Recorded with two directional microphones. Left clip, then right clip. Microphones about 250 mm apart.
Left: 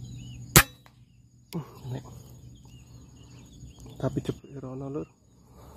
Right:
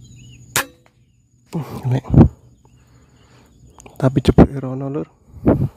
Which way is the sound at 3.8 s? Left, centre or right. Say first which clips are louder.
Right 13 dB; right.